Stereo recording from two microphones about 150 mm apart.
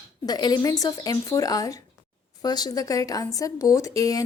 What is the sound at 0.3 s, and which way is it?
A woman's voice, 25° left (ahead or behind).